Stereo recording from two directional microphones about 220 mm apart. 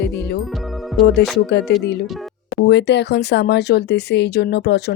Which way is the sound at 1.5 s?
50° left (ahead or behind).